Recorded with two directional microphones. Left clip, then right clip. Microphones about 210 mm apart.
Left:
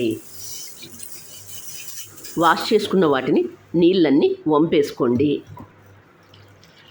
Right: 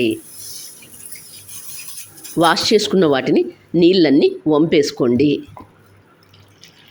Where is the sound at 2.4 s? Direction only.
15° right (ahead or behind).